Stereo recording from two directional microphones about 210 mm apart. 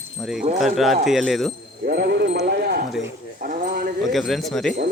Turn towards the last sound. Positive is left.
turn(degrees=0)  # may be behind; listen again after turning